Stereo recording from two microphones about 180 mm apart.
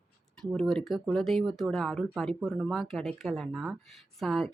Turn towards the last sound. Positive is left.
turn(degrees=0)  # may be behind; listen again after turning